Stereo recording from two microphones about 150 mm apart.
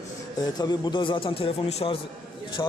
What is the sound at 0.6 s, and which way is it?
A man's voice, 25° left (ahead or behind).